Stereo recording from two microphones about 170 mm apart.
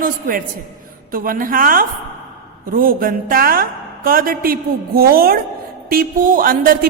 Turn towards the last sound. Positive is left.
turn(degrees=-55)  # may be behind; listen again after turning